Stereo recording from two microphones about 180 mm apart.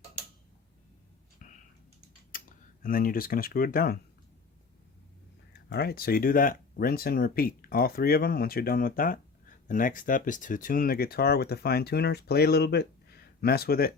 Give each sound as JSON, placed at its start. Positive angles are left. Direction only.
{"t": 2.3, "sound": "typing", "side_deg": 50}
{"t": 2.8, "sound": "speech", "side_deg": 50}
{"t": 5.5, "sound": "speech", "side_deg": 65}